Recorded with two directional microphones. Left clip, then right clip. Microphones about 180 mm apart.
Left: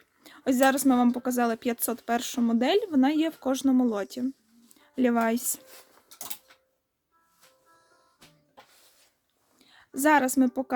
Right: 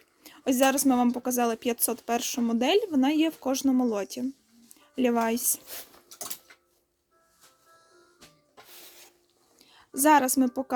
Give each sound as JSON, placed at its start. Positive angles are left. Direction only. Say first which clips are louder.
{"t": 0.2, "sound": "speech", "louder": "left 1 dB", "side_deg": 20}
{"t": 9.6, "sound": "a woman's voice", "louder": "right 1 dB", "side_deg": 15}